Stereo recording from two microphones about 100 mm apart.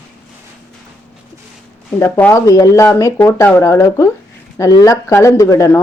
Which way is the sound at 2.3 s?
35° left (ahead or behind).